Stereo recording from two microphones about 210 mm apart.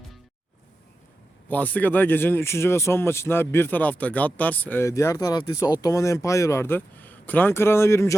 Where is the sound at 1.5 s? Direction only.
10° left (ahead or behind).